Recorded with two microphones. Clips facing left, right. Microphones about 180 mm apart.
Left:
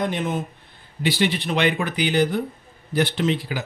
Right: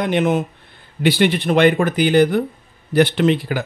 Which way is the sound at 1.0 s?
60° right (ahead or behind).